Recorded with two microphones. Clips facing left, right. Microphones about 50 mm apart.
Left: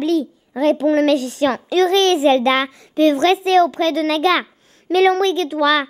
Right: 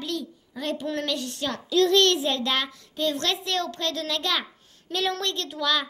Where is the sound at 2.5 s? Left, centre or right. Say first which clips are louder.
Left 10 dB; left.